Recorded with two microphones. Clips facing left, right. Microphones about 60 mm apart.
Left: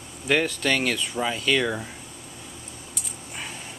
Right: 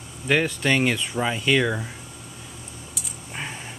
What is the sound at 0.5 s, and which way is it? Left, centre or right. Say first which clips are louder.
Speech: right 3 dB; centre.